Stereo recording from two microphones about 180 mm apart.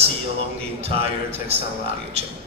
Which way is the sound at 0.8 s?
35° right (ahead or behind).